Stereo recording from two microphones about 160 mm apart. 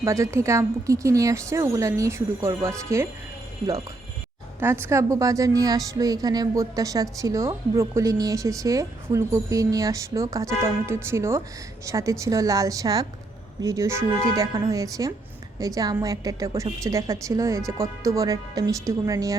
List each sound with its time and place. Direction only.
0.0 s a woman's voice: 20° right (ahead or behind)
4.6 s a woman's voice: 15° right (ahead or behind)